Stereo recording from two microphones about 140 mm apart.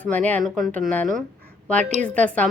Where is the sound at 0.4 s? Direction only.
Centre (ahead or behind).